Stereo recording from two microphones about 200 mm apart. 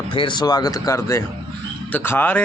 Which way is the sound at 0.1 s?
25° left (ahead or behind).